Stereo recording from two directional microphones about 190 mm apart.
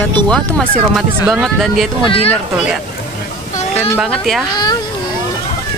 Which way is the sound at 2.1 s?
30° left (ahead or behind).